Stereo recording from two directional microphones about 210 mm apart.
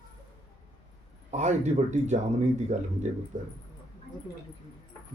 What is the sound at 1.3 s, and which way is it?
Speech, 35° right (ahead or behind).